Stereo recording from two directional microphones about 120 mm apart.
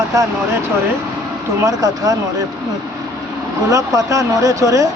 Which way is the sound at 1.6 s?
30° right (ahead or behind).